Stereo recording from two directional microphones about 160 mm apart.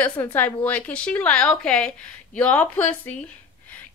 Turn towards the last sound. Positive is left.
turn(degrees=10)  # may be behind; listen again after turning